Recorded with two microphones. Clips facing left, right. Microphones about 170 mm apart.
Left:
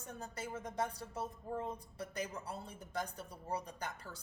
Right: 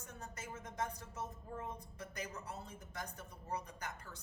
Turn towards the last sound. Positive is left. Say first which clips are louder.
# left 3 dB
turn(degrees=35)  # may be behind; listen again after turning